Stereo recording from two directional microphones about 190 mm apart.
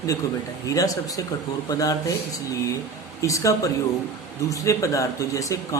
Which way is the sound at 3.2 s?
15° left (ahead or behind).